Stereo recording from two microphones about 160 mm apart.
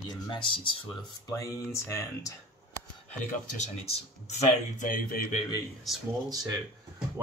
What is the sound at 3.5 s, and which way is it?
Speech, 45° left (ahead or behind).